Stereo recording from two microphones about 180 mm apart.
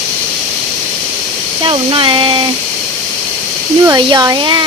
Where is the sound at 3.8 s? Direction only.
20° right (ahead or behind).